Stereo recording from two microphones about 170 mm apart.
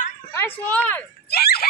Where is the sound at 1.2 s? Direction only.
65° left (ahead or behind).